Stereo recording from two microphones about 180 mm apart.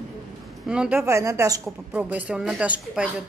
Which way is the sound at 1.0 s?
15° right (ahead or behind).